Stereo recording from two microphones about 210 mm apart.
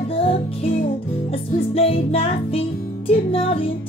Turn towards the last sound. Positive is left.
turn(degrees=25)  # may be behind; listen again after turning